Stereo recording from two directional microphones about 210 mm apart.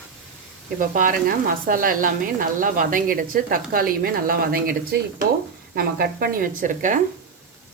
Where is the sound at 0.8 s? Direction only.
40° right (ahead or behind).